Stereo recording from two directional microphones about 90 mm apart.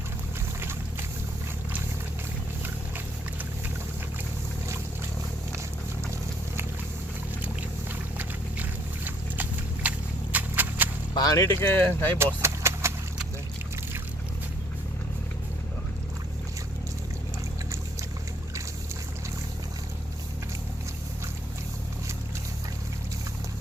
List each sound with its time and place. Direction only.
0.6 s boat: 25° right (ahead or behind)
2.6 s vehicle: 20° right (ahead or behind)
7.4 s boat: 20° right (ahead or behind)
9.0 s a sound: 20° right (ahead or behind)
11.1 s whip: 45° left (ahead or behind)
11.6 s speech: 25° left (ahead or behind)
12.2 s vehicle: 30° right (ahead or behind)